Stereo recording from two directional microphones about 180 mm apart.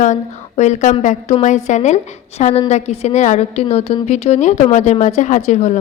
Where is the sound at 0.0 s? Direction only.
40° left (ahead or behind).